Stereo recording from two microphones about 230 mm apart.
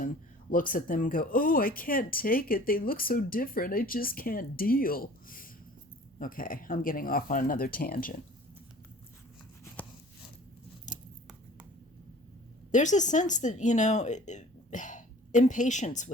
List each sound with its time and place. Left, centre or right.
0.5 s speech: left
10.9 s scissors: left
12.7 s speech: left